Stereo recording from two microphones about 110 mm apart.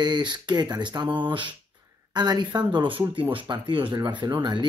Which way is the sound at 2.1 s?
40° right (ahead or behind).